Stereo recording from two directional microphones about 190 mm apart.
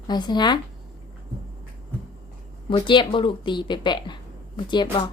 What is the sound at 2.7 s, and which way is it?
Speech, 25° left (ahead or behind).